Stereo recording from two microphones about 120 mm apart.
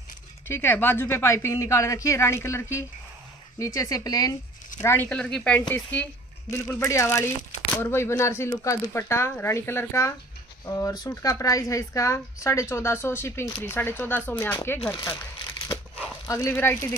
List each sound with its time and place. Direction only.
0.5 s speech: 20° left (ahead or behind)
4.8 s speech: 15° left (ahead or behind)
6.5 s speech: 25° left (ahead or behind)
14.9 s speech: 35° left (ahead or behind)
16.3 s speech: 25° left (ahead or behind)